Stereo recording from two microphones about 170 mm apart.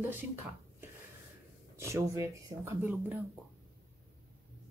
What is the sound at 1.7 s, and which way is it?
Speech, 15° right (ahead or behind).